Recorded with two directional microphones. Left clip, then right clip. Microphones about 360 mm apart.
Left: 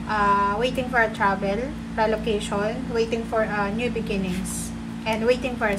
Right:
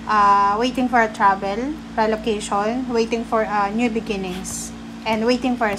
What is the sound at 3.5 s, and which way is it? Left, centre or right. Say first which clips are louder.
A woman's voice: right 5 dB; centre.